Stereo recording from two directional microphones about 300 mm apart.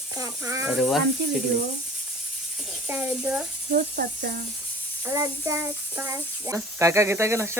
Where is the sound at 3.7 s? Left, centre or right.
Right.